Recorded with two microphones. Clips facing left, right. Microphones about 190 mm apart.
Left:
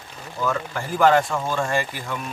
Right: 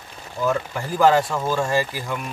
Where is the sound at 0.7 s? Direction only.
10° right (ahead or behind).